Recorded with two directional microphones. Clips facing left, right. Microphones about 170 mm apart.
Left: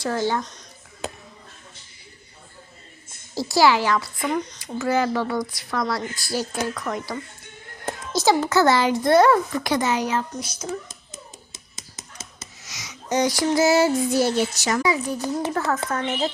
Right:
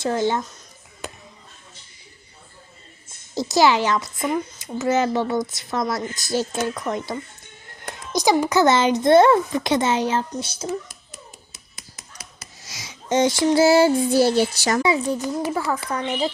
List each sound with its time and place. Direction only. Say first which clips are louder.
0.0 s speech: right 2 dB; 20° right (ahead or behind)
3.3 s speech: right 1 dB; 20° right (ahead or behind)
10.8 s dog: left 1 dB; 20° left (ahead or behind)
12.6 s child singing: right 3 dB; 30° right (ahead or behind)
14.8 s speech: right 3 dB; 25° right (ahead or behind)
15.5 s a woman's voice: even; 10° right (ahead or behind)